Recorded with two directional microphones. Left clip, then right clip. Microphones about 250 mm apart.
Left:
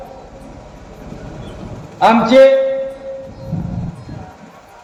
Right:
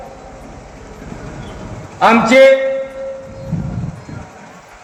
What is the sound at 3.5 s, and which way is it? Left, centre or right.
Music, right.